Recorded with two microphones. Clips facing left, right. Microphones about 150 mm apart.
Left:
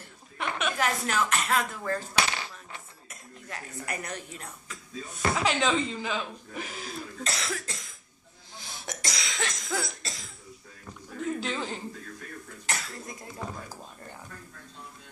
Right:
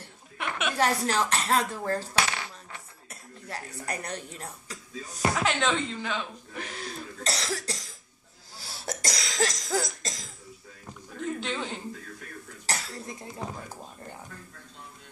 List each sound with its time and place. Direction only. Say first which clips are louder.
0.4 s chuckle: left 1 dB; centre (ahead or behind)
0.7 s speech: right 4 dB; 35° right (ahead or behind)
3.1 s speech: right 3 dB; 35° right (ahead or behind)
5.4 s speech: left 3 dB; centre (ahead or behind)
7.2 s cough: right 4 dB; 35° right (ahead or behind)
11.1 s speech: left 1 dB; centre (ahead or behind)
12.6 s speech: right 2 dB; 30° right (ahead or behind)